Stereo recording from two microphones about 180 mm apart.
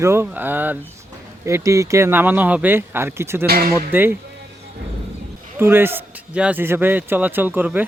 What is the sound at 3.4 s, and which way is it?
Speech, 60° right (ahead or behind).